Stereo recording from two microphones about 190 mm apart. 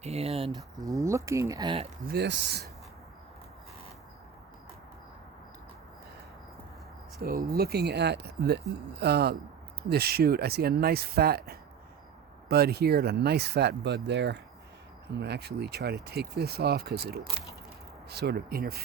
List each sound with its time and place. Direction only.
0.0 s speech: 35° right (ahead or behind)
0.5 s speech: 20° right (ahead or behind)
2.0 s speech: 60° right (ahead or behind)
7.2 s speech: 55° right (ahead or behind)